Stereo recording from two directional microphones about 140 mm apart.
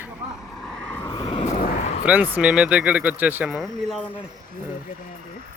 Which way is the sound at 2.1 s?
10° right (ahead or behind).